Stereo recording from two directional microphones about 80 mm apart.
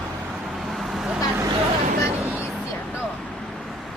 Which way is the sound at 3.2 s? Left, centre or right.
Centre.